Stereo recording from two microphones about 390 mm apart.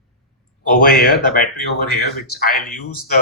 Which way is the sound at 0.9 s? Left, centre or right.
Left.